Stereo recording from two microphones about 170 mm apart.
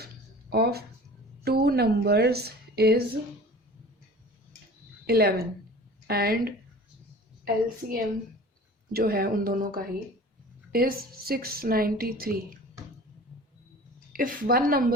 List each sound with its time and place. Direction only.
0.5 s a woman's voice: 65° right (ahead or behind)
5.0 s a woman's voice: 65° right (ahead or behind)
14.1 s a woman's voice: 55° right (ahead or behind)